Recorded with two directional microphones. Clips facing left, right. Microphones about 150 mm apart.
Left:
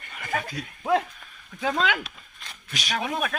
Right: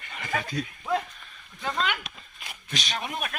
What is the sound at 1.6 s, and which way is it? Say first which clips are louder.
Speech: left 4 dB; 90° left.